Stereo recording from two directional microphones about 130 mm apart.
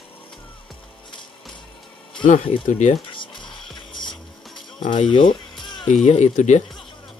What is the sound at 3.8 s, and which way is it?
Music, 40° left (ahead or behind).